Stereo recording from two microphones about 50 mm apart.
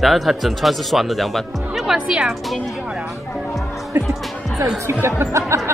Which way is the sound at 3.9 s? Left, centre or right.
Right.